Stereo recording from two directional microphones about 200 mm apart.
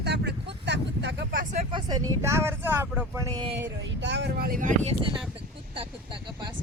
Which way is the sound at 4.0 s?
60° right (ahead or behind).